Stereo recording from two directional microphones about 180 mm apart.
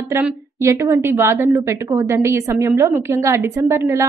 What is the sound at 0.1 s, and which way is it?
A woman's voice, 15° right (ahead or behind).